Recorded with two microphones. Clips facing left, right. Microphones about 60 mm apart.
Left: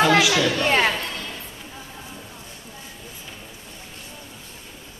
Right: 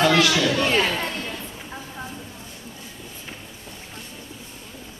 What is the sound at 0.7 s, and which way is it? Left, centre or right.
Speech, left.